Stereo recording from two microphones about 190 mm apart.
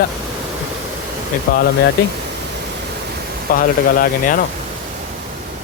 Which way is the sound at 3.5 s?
45° left (ahead or behind).